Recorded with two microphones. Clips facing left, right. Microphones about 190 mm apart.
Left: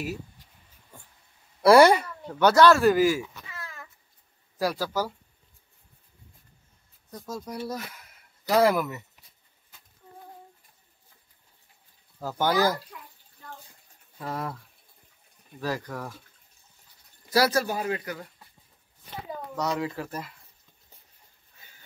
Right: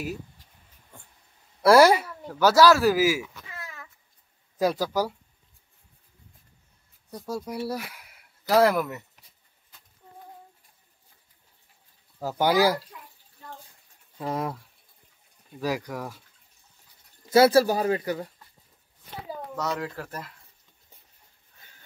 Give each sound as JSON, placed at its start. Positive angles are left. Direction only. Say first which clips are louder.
{"t": 0.0, "sound": "speech", "louder": "even", "side_deg": 0}
{"t": 1.6, "sound": "speech", "louder": "even", "side_deg": 0}
{"t": 4.6, "sound": "speech", "louder": "right 3 dB", "side_deg": -15}
{"t": 7.1, "sound": "speech", "louder": "right 3 dB", "side_deg": -10}
{"t": 12.2, "sound": "speech", "louder": "right 2 dB", "side_deg": -10}
{"t": 14.1, "sound": "speech", "louder": "right 4 dB", "side_deg": -15}
{"t": 15.6, "sound": "speech", "louder": "right 2 dB", "side_deg": -10}
{"t": 17.3, "sound": "speech", "louder": "right 6 dB", "side_deg": -25}
{"t": 19.5, "sound": "speech", "louder": "left 2 dB", "side_deg": 0}